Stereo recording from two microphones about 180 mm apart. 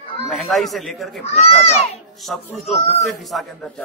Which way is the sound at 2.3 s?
Centre (ahead or behind).